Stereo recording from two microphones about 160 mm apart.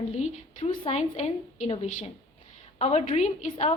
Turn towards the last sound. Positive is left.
turn(degrees=45)  # may be behind; listen again after turning